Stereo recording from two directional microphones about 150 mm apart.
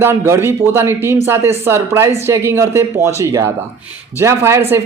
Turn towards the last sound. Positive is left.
turn(degrees=-15)  # may be behind; listen again after turning